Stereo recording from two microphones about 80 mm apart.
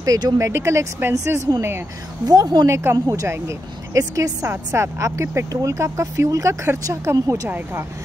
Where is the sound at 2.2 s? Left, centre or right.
Right.